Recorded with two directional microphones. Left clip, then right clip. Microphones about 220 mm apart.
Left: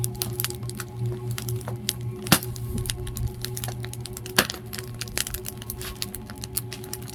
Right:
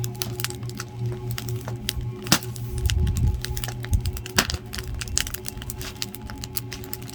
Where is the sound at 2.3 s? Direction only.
15° right (ahead or behind).